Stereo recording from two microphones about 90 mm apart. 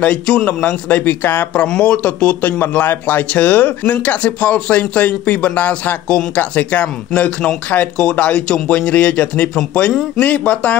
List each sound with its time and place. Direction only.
0.0 s speech: 15° left (ahead or behind)